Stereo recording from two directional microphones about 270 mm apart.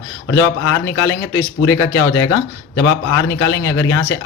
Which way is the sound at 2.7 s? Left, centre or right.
Left.